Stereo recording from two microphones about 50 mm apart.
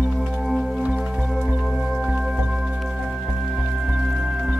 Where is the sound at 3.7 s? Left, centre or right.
Centre.